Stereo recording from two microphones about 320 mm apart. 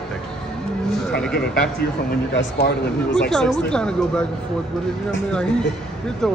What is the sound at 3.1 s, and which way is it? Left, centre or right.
Speech, centre.